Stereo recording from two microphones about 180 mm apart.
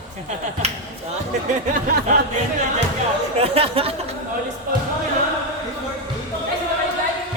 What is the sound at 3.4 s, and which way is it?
Speech, 35° right (ahead or behind).